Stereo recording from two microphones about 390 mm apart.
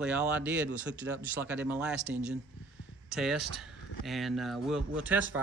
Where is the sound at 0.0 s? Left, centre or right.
Centre.